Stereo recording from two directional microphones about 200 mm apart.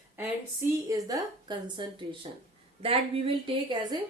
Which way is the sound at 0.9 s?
20° right (ahead or behind).